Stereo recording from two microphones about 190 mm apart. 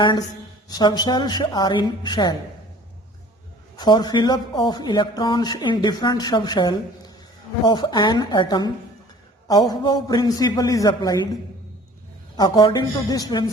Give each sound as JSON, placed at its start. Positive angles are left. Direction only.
{"t": 0.0, "sound": "speech", "side_deg": 25}
{"t": 3.8, "sound": "speech", "side_deg": 20}
{"t": 12.4, "sound": "speech", "side_deg": 20}